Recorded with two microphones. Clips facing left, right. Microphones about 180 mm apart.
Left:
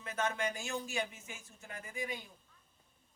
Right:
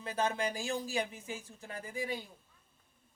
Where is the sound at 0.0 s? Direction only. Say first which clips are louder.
Right 3 dB; 35° right (ahead or behind).